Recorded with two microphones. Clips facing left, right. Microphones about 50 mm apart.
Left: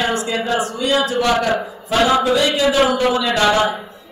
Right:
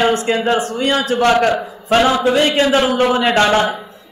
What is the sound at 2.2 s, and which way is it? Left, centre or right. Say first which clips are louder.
Speech: right 2 dB; right.